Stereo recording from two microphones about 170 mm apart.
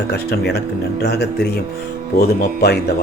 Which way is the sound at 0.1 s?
75° left (ahead or behind).